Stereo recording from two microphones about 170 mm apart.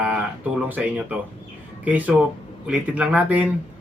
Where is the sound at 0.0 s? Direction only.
5° right (ahead or behind).